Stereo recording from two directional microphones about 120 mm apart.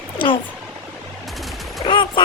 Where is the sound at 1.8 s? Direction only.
40° left (ahead or behind).